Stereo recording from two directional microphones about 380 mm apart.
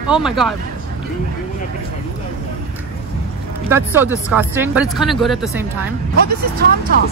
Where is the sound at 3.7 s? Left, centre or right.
Centre.